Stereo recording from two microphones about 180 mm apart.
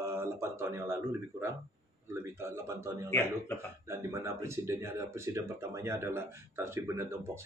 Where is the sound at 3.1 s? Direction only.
15° left (ahead or behind).